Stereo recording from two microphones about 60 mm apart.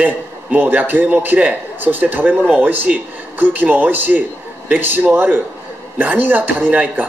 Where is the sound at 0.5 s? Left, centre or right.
Right.